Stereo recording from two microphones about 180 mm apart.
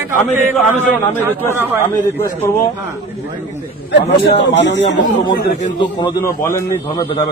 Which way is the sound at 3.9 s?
70° left (ahead or behind).